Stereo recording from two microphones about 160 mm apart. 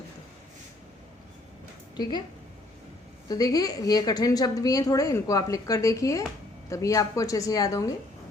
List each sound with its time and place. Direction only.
2.0 s a woman's voice: 25° left (ahead or behind)
3.2 s a woman's voice: 25° left (ahead or behind)